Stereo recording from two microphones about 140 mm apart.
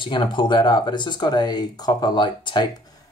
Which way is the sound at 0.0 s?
35° left (ahead or behind).